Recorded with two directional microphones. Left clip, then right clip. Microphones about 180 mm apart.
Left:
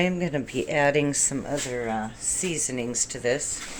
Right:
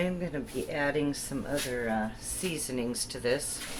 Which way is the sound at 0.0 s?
30° left (ahead or behind).